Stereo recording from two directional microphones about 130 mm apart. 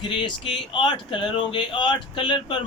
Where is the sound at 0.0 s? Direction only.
40° left (ahead or behind).